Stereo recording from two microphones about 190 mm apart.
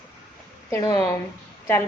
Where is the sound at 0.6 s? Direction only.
15° left (ahead or behind).